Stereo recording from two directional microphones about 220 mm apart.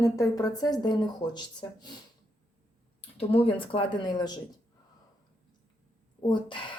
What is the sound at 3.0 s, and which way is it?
Speech, 25° left (ahead or behind).